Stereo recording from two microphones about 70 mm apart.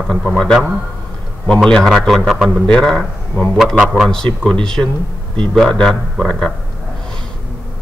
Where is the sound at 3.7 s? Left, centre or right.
Centre.